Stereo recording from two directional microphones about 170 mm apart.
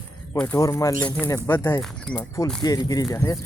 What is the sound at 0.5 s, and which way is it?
Speech, 20° left (ahead or behind).